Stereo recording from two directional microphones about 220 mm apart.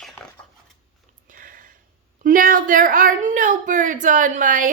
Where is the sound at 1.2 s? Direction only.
40° right (ahead or behind).